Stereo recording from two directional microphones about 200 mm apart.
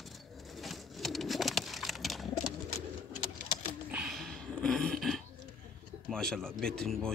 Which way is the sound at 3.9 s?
Centre (ahead or behind).